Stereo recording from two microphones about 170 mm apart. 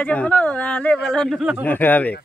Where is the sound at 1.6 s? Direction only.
10° left (ahead or behind).